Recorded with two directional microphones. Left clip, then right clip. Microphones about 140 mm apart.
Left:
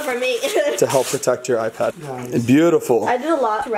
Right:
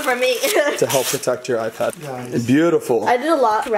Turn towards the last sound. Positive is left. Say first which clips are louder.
# right 2 dB
turn(degrees=-30)  # may be behind; listen again after turning